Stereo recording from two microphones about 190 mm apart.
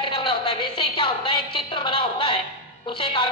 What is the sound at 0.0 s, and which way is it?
Music, 25° left (ahead or behind).